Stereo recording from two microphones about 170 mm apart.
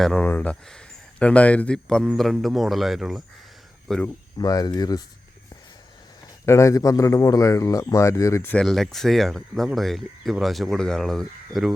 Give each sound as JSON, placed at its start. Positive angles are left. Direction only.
{"t": 0.0, "sound": "speech", "side_deg": 5}
{"t": 4.4, "sound": "speech", "side_deg": 20}
{"t": 6.4, "sound": "a man's voice", "side_deg": 15}
{"t": 8.6, "sound": "speech", "side_deg": 0}